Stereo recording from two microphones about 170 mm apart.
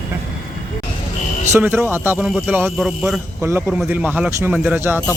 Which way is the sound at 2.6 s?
Centre (ahead or behind).